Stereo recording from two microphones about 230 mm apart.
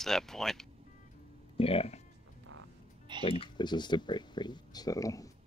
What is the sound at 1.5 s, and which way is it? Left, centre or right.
Speech, left.